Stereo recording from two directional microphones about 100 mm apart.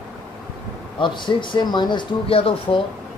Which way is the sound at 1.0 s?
55° left (ahead or behind).